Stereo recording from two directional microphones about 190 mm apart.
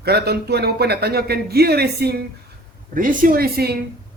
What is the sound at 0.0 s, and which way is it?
Speech, 55° right (ahead or behind).